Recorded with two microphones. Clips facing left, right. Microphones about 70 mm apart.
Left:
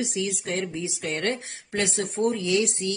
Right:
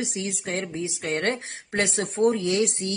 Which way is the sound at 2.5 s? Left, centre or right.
Right.